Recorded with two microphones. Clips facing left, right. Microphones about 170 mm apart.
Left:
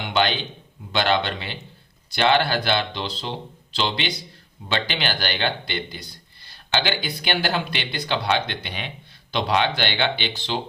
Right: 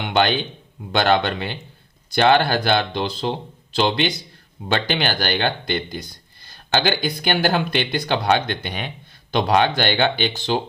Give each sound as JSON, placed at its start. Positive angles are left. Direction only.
{"t": 0.1, "sound": "a man's voice", "side_deg": -50}